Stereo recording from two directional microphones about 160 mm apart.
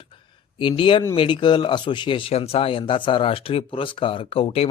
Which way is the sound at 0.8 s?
30° left (ahead or behind).